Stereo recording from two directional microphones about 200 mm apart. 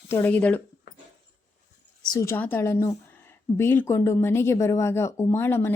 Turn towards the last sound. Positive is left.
turn(degrees=10)  # may be behind; listen again after turning